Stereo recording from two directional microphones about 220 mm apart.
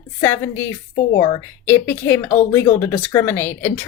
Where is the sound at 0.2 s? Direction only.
10° left (ahead or behind).